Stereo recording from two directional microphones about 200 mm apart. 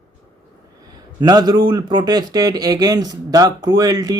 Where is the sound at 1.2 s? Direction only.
20° right (ahead or behind).